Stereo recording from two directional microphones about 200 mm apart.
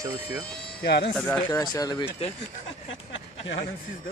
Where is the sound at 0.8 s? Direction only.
55° left (ahead or behind).